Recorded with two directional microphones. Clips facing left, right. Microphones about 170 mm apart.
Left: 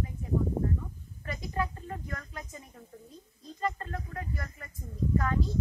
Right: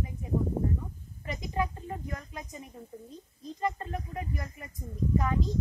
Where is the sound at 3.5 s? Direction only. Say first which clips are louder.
Right 1 dB; 15° right (ahead or behind).